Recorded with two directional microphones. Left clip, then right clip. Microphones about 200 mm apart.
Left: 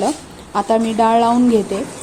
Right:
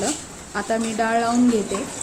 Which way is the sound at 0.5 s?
30° left (ahead or behind).